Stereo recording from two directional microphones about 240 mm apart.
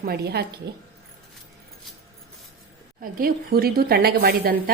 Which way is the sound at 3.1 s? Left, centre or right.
Right.